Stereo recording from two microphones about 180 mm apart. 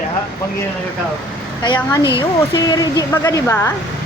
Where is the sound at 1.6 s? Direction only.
25° left (ahead or behind).